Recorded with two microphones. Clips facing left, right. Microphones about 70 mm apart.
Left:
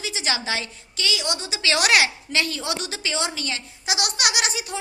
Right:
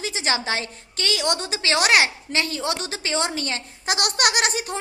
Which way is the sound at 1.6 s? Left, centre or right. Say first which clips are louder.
Even; right.